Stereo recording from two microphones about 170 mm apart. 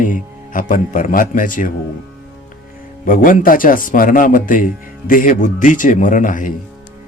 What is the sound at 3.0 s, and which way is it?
Music, 55° left (ahead or behind).